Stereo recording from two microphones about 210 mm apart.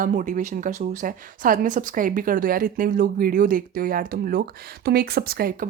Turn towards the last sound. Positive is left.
turn(degrees=-45)  # may be behind; listen again after turning